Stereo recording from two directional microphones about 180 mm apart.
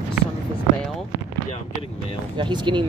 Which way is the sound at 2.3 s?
25° right (ahead or behind).